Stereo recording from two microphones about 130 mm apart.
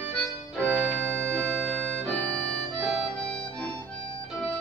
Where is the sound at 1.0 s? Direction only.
20° right (ahead or behind).